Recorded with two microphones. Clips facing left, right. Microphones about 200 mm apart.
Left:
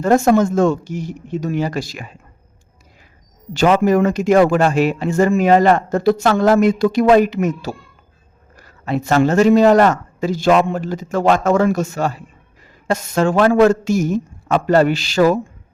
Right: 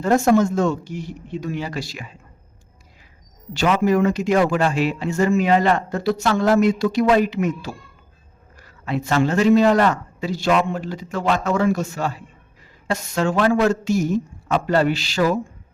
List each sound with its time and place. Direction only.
0.0 s a man's voice: 50° left (ahead or behind)
3.5 s a man's voice: 45° left (ahead or behind)
8.8 s a man's voice: 45° left (ahead or behind)